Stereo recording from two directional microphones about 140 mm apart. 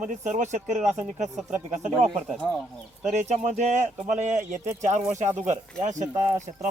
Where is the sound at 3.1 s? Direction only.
55° right (ahead or behind).